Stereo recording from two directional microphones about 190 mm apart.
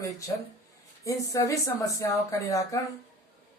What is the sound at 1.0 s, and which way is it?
Speech, 15° left (ahead or behind).